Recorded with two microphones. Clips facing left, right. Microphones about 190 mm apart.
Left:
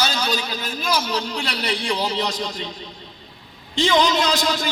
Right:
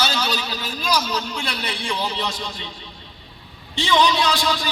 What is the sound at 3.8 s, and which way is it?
Speech, 45° left (ahead or behind).